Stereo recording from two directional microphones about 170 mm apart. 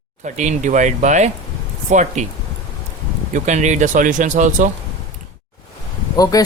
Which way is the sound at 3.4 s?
45° right (ahead or behind).